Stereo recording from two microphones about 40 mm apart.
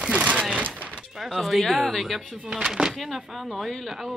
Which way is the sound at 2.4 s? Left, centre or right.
Centre.